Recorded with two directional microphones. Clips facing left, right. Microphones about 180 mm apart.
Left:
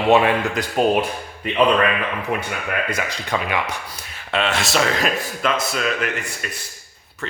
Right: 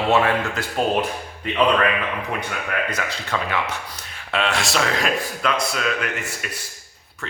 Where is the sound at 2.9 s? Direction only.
15° left (ahead or behind).